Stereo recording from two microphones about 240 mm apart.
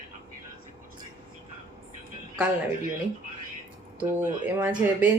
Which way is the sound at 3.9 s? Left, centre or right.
Centre.